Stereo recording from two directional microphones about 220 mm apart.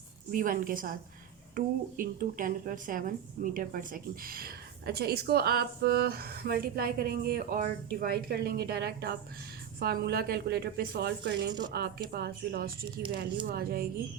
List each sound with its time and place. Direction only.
0.3 s a woman's voice: 40° right (ahead or behind)